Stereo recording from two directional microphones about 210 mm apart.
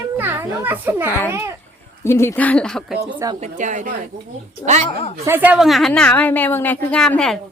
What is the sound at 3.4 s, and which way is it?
Speech, 35° right (ahead or behind).